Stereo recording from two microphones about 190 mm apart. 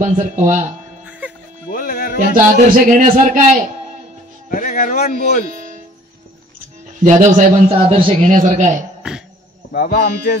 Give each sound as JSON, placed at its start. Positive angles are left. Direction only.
{"t": 0.0, "sound": "speech", "side_deg": -40}
{"t": 1.7, "sound": "music", "side_deg": 50}
{"t": 2.2, "sound": "speech", "side_deg": -45}
{"t": 4.5, "sound": "a man's voice", "side_deg": 45}
{"t": 7.0, "sound": "speech", "side_deg": -45}
{"t": 9.7, "sound": "speech", "side_deg": 50}